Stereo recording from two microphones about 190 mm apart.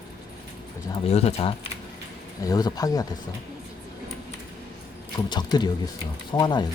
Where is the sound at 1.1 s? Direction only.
35° left (ahead or behind).